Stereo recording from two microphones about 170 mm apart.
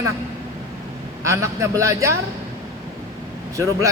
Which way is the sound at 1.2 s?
15° right (ahead or behind).